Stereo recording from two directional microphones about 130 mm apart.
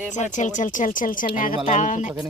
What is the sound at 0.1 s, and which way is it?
Speech, 65° left (ahead or behind).